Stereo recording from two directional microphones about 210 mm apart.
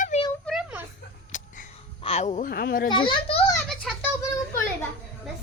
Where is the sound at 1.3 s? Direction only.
35° left (ahead or behind).